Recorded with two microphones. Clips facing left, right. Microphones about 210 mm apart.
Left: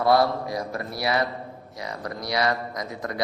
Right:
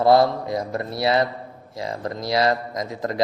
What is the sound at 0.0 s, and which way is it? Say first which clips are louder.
A man's voice: right 4 dB; 25° right (ahead or behind).